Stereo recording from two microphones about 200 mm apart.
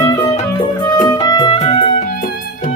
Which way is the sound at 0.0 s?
20° left (ahead or behind).